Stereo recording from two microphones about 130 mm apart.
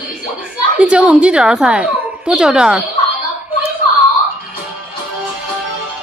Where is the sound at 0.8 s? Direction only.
10° right (ahead or behind).